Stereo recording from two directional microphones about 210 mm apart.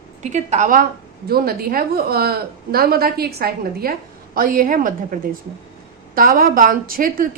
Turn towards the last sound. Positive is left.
turn(degrees=-40)  # may be behind; listen again after turning